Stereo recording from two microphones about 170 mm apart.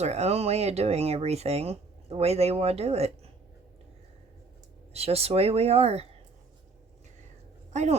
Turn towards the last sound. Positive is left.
turn(degrees=-40)  # may be behind; listen again after turning